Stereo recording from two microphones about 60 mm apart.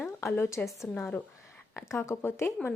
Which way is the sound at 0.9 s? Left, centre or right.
Left.